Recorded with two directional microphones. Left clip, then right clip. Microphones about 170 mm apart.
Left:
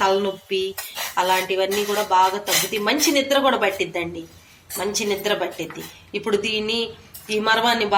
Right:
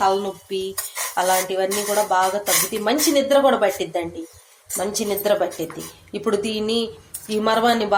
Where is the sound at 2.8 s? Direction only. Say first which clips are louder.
Right 3 dB; 40° right (ahead or behind).